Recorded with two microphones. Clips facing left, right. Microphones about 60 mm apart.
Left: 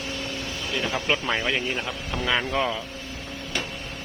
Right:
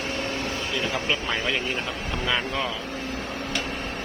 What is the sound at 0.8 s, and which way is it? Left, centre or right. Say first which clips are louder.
Speech: left 3 dB; left.